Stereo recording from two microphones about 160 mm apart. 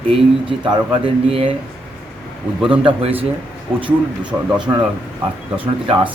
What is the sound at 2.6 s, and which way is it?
Speech, 30° right (ahead or behind).